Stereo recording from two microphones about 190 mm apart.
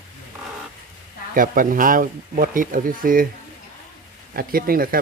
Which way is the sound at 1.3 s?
45° right (ahead or behind).